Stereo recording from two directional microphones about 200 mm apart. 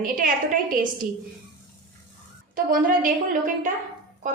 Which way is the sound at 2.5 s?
45° right (ahead or behind).